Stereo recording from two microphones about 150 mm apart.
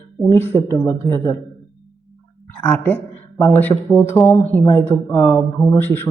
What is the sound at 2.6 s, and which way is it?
A man's voice, 10° left (ahead or behind).